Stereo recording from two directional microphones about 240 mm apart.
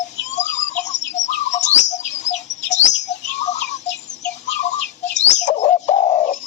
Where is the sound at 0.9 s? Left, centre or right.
Left.